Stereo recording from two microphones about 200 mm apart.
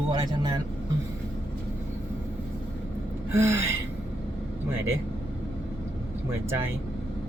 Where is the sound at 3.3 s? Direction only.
15° right (ahead or behind).